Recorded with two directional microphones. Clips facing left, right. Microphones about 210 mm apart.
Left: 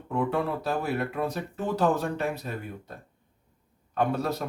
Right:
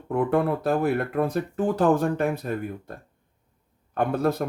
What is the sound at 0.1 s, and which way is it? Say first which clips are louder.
Speech: right 5 dB; 55° right (ahead or behind).